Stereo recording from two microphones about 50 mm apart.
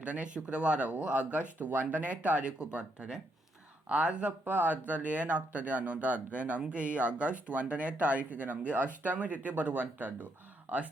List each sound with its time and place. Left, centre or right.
0.0 s speech: right